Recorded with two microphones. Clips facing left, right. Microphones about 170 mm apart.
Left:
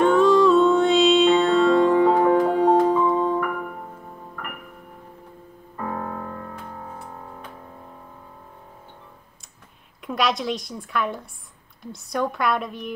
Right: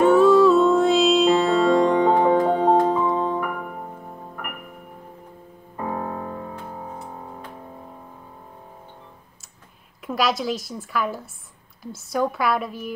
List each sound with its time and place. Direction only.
0.0 s music: 5° right (ahead or behind); by 2.8 s 10° left (ahead or behind)
2.9 s music: 15° right (ahead or behind)
5.8 s music: 15° right (ahead or behind)
10.0 s a woman's voice: centre (ahead or behind)